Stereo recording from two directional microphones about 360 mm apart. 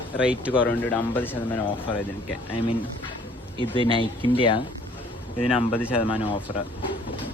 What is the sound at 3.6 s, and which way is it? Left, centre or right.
Speech, centre.